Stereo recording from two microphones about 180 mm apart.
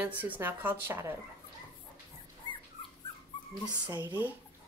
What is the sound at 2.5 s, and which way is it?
Dog, 30° left (ahead or behind).